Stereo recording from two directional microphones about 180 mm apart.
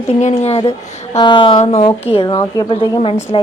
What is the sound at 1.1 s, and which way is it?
A woman's voice, 25° left (ahead or behind).